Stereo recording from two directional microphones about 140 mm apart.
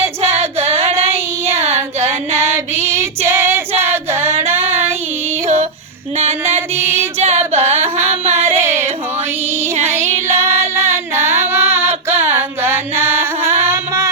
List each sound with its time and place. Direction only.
0.3 s female singing: 50° right (ahead or behind)
1.5 s child singing: 50° right (ahead or behind)
2.7 s female singing: 20° right (ahead or behind)
6.4 s music: 15° right (ahead or behind)
7.2 s singing: 50° right (ahead or behind)
7.8 s carnatic music: 15° right (ahead or behind)
8.3 s a sound: 15° right (ahead or behind)
9.9 s female singing: 20° right (ahead or behind)
11.2 s child singing: 15° right (ahead or behind)
12.0 s a sound: 15° right (ahead or behind)